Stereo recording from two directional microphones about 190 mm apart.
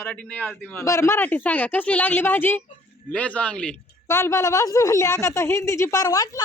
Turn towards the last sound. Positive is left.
turn(degrees=20)  # may be behind; listen again after turning